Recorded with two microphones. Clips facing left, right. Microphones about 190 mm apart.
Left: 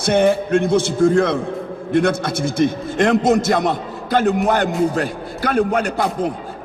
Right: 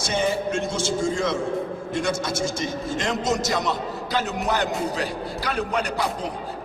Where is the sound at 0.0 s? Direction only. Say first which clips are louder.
Left 8 dB; 60° left (ahead or behind).